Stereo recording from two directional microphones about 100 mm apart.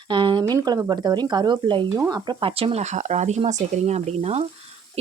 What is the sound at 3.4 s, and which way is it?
Speech, 90° right.